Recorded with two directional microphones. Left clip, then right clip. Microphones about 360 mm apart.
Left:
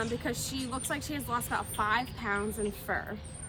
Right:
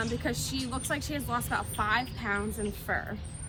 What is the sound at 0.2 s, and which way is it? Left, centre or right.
A woman's voice, centre.